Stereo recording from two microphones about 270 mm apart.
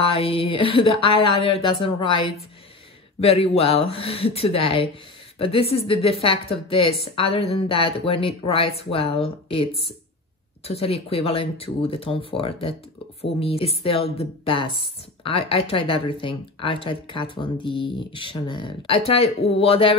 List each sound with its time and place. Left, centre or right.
0.0 s speech: left